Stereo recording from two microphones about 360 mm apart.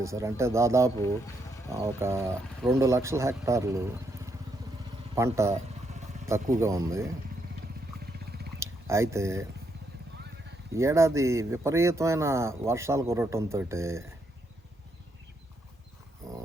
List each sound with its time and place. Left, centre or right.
0.0 s speech: centre
2.0 s speech: centre
6.6 s speech: centre
8.0 s a sound: right
8.6 s speech: centre
10.8 s speech: centre